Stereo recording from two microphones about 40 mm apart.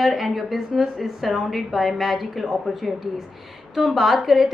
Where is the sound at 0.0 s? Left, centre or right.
Centre.